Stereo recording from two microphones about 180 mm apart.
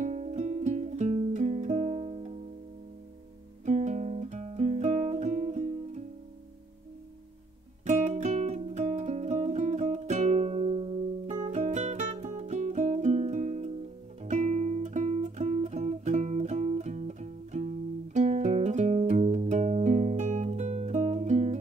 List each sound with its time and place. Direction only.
0.0 s music: 40° right (ahead or behind)
3.6 s guitar: 40° right (ahead or behind)
7.8 s music: 40° right (ahead or behind)
14.2 s guitar: 40° right (ahead or behind)